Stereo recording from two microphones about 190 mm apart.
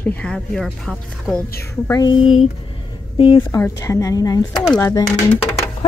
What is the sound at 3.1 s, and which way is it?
Speech, 25° left (ahead or behind).